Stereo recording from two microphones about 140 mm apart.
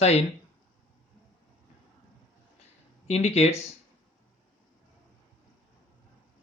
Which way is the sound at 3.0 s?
50° left (ahead or behind).